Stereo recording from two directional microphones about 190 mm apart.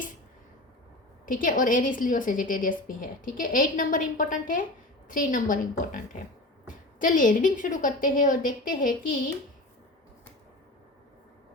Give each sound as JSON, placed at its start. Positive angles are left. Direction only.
{"t": 1.2, "sound": "a woman's voice", "side_deg": 45}